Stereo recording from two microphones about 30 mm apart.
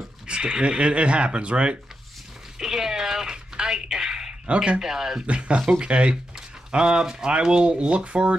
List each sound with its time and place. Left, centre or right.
0.3 s speech: right
2.6 s a sound: centre
4.7 s speech: centre
5.2 s speech: right